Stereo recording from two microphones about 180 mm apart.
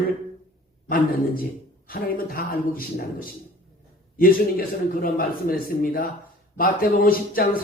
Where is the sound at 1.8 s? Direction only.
55° left (ahead or behind).